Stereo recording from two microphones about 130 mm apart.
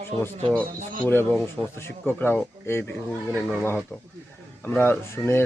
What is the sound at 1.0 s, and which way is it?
Speech, 15° left (ahead or behind).